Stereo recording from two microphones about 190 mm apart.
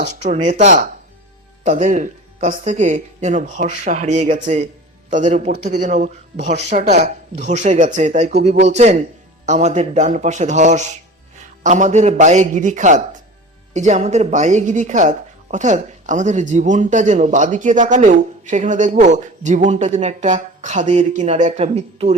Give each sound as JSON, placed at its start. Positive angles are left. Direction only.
{"t": 0.0, "sound": "speech", "side_deg": -40}